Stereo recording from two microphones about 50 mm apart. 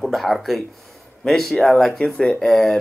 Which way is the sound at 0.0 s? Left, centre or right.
Centre.